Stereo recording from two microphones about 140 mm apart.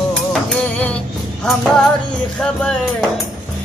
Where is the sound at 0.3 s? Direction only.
10° left (ahead or behind).